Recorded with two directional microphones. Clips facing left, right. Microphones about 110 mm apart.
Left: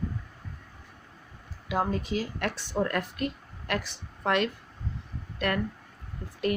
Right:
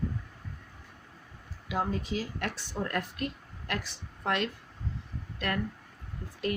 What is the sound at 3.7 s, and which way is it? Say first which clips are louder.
Speech: left 4 dB; 75° left (ahead or behind).